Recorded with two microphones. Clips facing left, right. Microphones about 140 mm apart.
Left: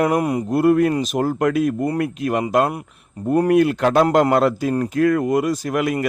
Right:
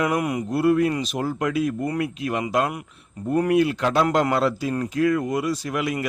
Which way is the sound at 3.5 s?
50° left (ahead or behind).